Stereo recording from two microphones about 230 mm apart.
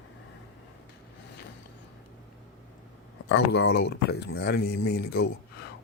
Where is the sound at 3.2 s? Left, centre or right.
Left.